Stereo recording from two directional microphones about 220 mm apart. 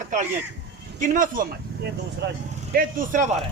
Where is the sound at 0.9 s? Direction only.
35° right (ahead or behind).